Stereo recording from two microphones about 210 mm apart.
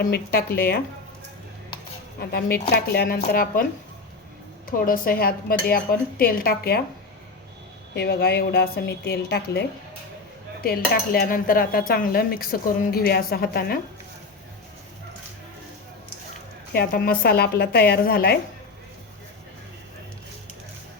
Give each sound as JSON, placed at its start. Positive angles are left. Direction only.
{"t": 0.0, "sound": "cutlery", "side_deg": 45}
{"t": 2.3, "sound": "cutlery", "side_deg": 50}
{"t": 4.9, "sound": "cutlery", "side_deg": 45}
{"t": 7.9, "sound": "cutlery", "side_deg": 50}
{"t": 16.7, "sound": "cutlery", "side_deg": 45}